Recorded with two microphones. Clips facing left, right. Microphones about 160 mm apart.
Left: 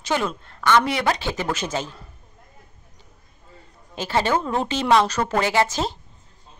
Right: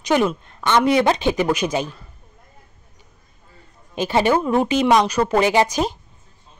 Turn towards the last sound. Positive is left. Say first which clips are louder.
# right 4 dB
turn(degrees=-15)  # may be behind; listen again after turning